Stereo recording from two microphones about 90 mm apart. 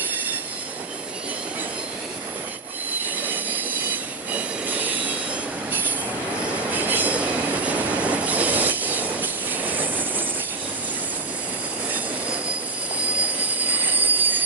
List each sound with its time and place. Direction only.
3.2 s train wheels squealing: 20° right (ahead or behind)
4.3 s train: 15° right (ahead or behind)
6.7 s train: 20° right (ahead or behind)
13.8 s train wheels squealing: 20° right (ahead or behind)